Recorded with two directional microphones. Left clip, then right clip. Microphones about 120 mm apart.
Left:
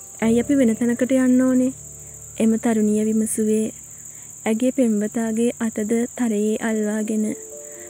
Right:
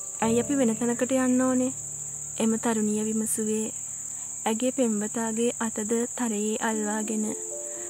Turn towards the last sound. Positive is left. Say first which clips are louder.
# left 5 dB
turn(degrees=0)  # may be behind; listen again after turning